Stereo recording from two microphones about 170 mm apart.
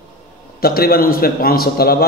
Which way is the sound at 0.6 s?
60° left (ahead or behind).